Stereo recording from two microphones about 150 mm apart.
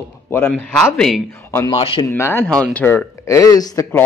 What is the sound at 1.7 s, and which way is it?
Speech, 40° left (ahead or behind).